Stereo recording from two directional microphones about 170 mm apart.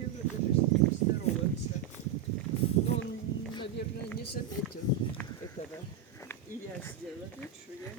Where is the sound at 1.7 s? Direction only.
35° left (ahead or behind).